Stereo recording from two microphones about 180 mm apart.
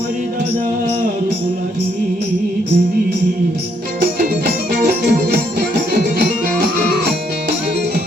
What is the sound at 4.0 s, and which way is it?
Music, 55° right (ahead or behind).